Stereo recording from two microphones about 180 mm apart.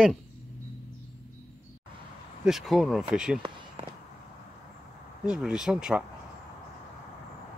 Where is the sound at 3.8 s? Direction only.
30° right (ahead or behind).